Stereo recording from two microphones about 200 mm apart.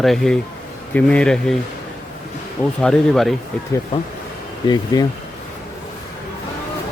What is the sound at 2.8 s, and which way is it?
Speech, centre (ahead or behind).